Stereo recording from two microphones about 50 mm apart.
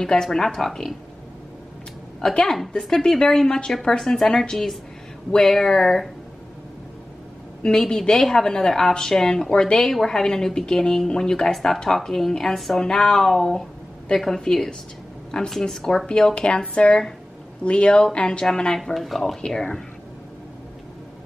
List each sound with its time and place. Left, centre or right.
0.0 s a woman's voice: centre
2.2 s a woman's voice: centre
7.6 s a woman's voice: centre